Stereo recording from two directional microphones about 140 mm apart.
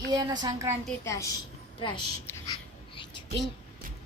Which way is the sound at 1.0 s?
20° left (ahead or behind).